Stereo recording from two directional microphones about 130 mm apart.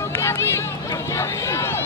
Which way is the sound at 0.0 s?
20° left (ahead or behind).